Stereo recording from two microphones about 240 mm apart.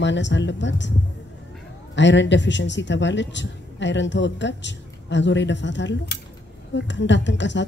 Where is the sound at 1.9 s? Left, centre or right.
Left.